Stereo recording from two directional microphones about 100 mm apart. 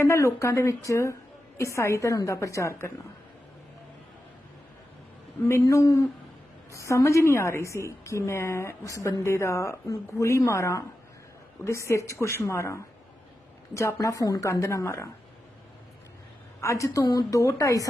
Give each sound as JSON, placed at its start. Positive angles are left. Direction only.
{"t": 0.0, "sound": "a woman's voice", "side_deg": 30}
{"t": 5.5, "sound": "a woman's voice", "side_deg": 30}
{"t": 16.6, "sound": "a woman's voice", "side_deg": 30}